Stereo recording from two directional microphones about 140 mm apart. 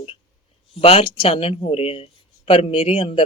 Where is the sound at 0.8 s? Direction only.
45° left (ahead or behind).